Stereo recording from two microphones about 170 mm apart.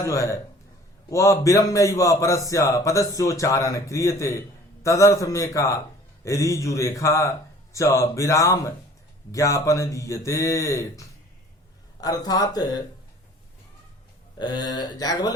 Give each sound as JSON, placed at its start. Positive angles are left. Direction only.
{"t": 0.0, "sound": "a man's voice", "side_deg": 15}
{"t": 14.3, "sound": "a man's voice", "side_deg": 25}